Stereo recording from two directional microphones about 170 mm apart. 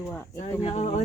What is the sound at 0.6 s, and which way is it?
Speech, 35° left (ahead or behind).